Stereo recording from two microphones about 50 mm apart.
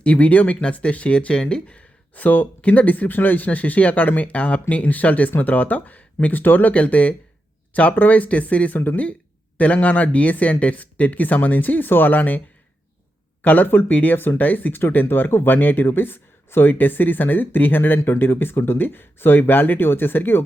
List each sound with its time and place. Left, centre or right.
0.0 s speech: left
2.1 s speech: left
13.4 s speech: left